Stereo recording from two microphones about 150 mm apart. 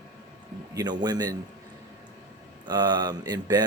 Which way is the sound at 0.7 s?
25° right (ahead or behind).